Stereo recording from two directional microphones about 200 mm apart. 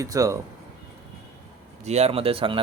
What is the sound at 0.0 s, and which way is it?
Speech, 15° right (ahead or behind).